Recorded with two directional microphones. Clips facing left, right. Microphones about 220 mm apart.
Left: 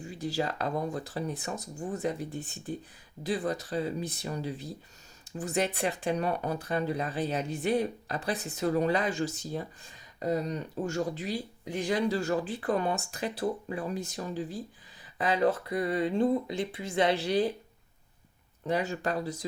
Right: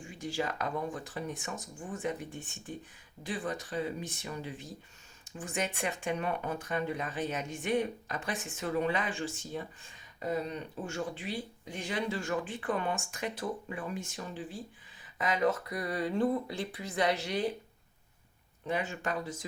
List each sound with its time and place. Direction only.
0.0 s speech: 40° left (ahead or behind)
18.7 s speech: 40° left (ahead or behind)